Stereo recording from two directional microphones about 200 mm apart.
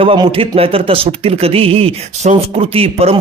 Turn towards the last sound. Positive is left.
turn(degrees=-30)  # may be behind; listen again after turning